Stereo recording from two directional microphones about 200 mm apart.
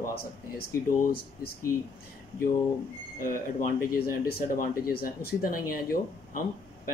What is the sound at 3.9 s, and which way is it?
Speech, 45° left (ahead or behind).